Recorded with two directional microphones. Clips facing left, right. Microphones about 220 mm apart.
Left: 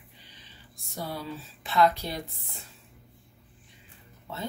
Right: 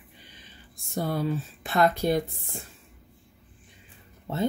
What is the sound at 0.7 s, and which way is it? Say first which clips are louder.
Speech: right 7 dB; 50° right (ahead or behind).